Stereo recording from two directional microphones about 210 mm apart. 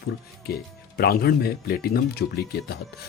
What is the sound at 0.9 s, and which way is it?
Speech, 50° left (ahead or behind).